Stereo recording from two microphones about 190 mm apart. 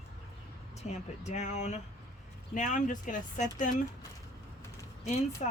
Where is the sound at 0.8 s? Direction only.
35° left (ahead or behind).